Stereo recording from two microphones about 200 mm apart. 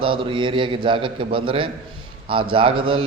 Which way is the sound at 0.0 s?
25° right (ahead or behind).